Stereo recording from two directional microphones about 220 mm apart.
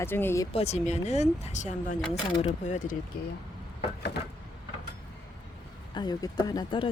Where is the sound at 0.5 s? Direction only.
30° left (ahead or behind).